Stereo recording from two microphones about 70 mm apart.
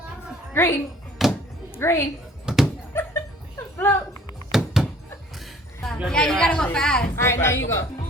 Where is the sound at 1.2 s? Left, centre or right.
Centre.